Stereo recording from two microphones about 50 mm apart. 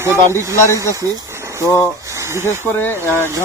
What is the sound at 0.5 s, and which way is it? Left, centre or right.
Speech, left.